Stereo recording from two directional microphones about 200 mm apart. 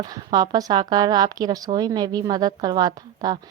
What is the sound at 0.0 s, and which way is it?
A woman's voice, 20° right (ahead or behind).